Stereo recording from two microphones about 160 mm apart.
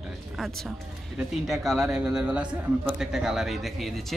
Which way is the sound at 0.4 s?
Centre (ahead or behind).